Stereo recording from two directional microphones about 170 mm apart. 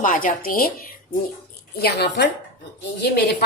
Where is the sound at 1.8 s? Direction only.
75° left (ahead or behind).